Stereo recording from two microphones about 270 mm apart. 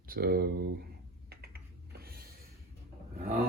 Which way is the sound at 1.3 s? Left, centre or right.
Right.